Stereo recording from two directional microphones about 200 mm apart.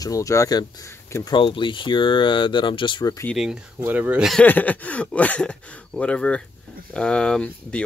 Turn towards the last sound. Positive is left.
turn(degrees=5)  # may be behind; listen again after turning